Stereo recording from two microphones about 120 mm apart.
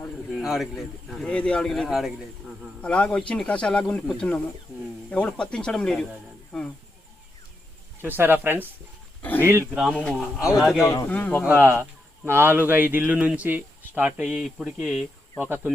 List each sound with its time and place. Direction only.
0.3 s speech: centre (ahead or behind)
2.8 s speech: 10° left (ahead or behind)
8.0 s speech: 15° right (ahead or behind)
9.9 s speech: 10° left (ahead or behind)
11.1 s speech: 15° left (ahead or behind)
11.4 s speech: 20° right (ahead or behind); by 15.0 s centre (ahead or behind)
15.4 s speech: 15° right (ahead or behind)